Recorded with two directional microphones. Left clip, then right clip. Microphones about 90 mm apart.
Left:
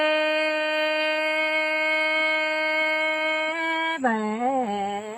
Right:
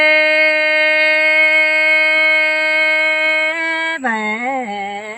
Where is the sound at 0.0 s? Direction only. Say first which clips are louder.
Right 11 dB; 25° right (ahead or behind).